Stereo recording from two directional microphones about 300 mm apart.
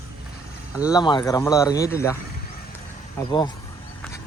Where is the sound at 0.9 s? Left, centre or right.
Centre.